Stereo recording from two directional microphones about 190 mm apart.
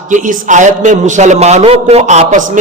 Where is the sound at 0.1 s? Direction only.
40° right (ahead or behind).